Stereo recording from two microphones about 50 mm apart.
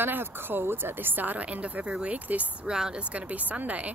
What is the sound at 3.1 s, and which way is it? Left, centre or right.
Speech, right.